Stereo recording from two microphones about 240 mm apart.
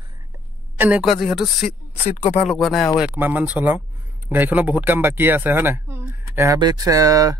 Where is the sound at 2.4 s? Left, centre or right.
Centre.